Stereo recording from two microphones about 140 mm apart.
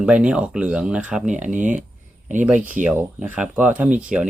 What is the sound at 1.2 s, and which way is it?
Speech, 60° right (ahead or behind).